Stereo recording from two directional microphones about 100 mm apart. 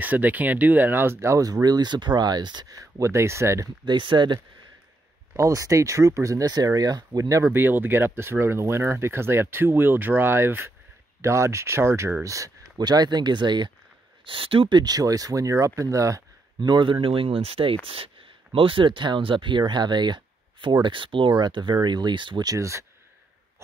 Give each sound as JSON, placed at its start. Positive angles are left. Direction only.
{"t": 0.0, "sound": "speech", "side_deg": -15}
{"t": 3.8, "sound": "speech", "side_deg": -55}
{"t": 5.3, "sound": "speech", "side_deg": -35}
{"t": 12.7, "sound": "speech", "side_deg": -45}
{"t": 14.2, "sound": "speech", "side_deg": -60}
{"t": 14.8, "sound": "speech", "side_deg": -40}
{"t": 16.5, "sound": "speech", "side_deg": -50}
{"t": 22.5, "sound": "speech", "side_deg": -30}